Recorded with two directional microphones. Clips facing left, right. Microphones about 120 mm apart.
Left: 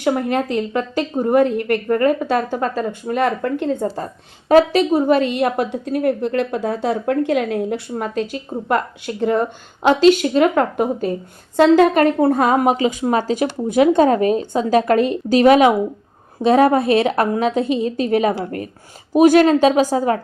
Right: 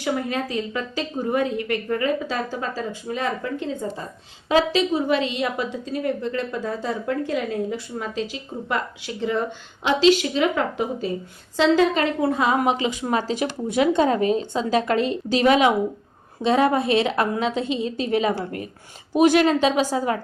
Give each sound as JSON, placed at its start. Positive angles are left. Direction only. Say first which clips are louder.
{"t": 0.0, "sound": "a woman's voice", "louder": "left 6 dB", "side_deg": 55}
{"t": 4.5, "sound": "a woman's voice", "louder": "left 7 dB", "side_deg": 55}